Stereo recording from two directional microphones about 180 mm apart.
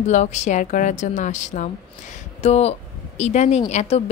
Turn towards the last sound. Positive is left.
turn(degrees=40)  # may be behind; listen again after turning